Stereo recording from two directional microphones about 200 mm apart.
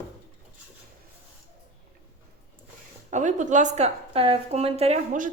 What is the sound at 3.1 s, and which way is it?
A woman's voice, 40° right (ahead or behind).